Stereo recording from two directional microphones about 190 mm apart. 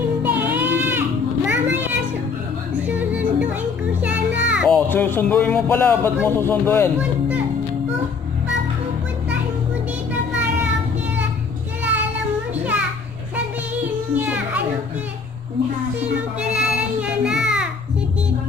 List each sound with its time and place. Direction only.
0.2 s a sound: 10° right (ahead or behind)
2.9 s music: 10° right (ahead or behind)
4.1 s a sound: 70° right (ahead or behind)
4.6 s speech: 5° left (ahead or behind)
7.0 s a child's voice: 10° right (ahead or behind)
14.1 s children playing: 10° right (ahead or behind)
16.0 s music: 5° right (ahead or behind)